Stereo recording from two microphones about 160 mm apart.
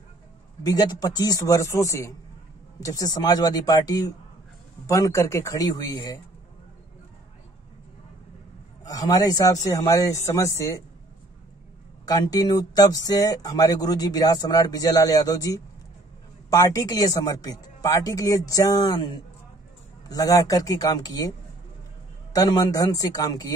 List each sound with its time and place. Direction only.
0.7 s speech: 25° left (ahead or behind)
8.8 s speech: 20° left (ahead or behind)
12.1 s speech: 25° left (ahead or behind)
22.3 s speech: 25° left (ahead or behind)